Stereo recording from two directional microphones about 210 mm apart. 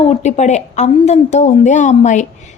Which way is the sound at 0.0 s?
30° left (ahead or behind).